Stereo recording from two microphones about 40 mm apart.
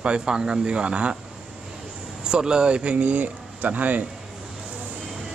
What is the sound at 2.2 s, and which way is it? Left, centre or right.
Speech, centre.